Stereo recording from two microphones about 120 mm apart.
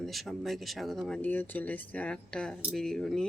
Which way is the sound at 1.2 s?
15° left (ahead or behind).